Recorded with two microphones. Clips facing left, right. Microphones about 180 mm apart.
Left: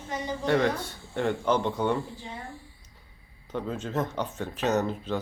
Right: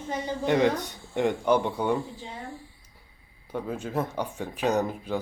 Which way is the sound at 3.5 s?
10° right (ahead or behind).